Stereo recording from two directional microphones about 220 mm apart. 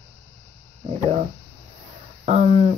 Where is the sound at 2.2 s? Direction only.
30° right (ahead or behind).